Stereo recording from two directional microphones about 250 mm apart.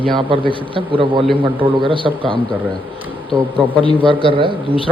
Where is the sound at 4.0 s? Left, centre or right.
Centre.